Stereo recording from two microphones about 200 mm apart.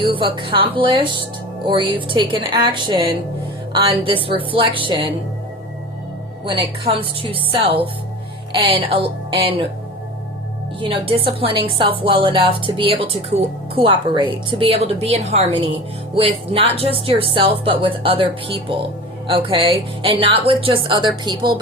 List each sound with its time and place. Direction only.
0.0 s a woman's voice: 25° right (ahead or behind)
6.4 s a woman's voice: 25° right (ahead or behind)
10.8 s a woman's voice: 25° right (ahead or behind)